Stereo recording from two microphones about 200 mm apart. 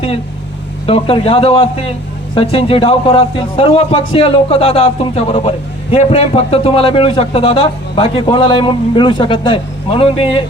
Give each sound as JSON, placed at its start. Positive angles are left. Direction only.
{"t": 0.9, "sound": "a man's voice", "side_deg": 30}